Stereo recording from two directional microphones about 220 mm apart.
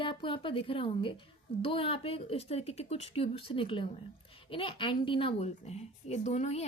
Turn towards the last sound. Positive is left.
turn(degrees=30)  # may be behind; listen again after turning